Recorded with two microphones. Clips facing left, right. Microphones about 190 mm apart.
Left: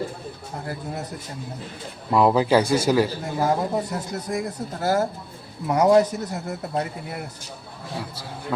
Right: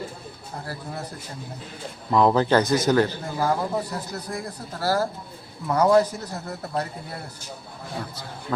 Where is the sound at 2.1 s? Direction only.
10° left (ahead or behind).